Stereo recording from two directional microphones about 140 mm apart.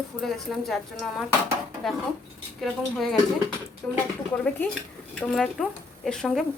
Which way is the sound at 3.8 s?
15° left (ahead or behind).